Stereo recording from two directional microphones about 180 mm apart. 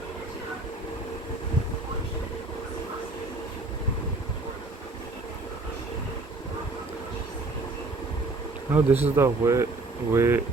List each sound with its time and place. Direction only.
8.7 s speech: 10° right (ahead or behind)